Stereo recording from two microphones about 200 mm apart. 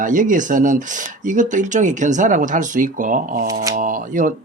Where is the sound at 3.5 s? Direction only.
15° right (ahead or behind).